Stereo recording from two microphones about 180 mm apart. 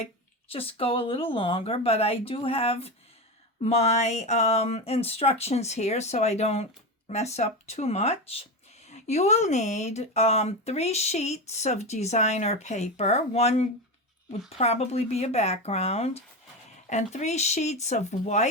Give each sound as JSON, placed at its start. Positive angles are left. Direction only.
{"t": 0.0, "sound": "speech", "side_deg": 30}